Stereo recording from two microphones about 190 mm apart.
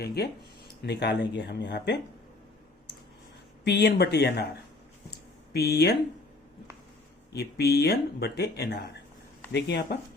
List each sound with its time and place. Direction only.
0.0 s speech: 55° left (ahead or behind)
3.6 s speech: 65° left (ahead or behind)
5.5 s speech: 60° left (ahead or behind)
7.3 s speech: 60° left (ahead or behind)